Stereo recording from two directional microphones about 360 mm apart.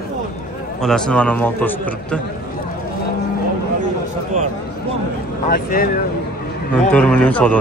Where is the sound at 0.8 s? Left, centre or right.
Centre.